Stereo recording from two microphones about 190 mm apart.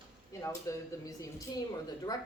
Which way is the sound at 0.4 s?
15° left (ahead or behind).